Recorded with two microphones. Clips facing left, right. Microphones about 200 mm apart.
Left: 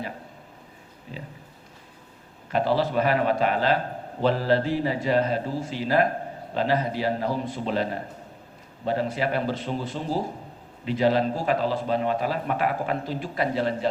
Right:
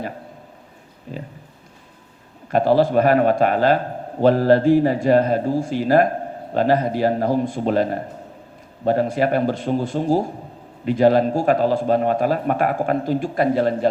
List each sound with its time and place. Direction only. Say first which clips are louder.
1.1 s pig: right 7 dB; 50° right (ahead or behind)
2.5 s a man's voice: right 7 dB; 50° right (ahead or behind)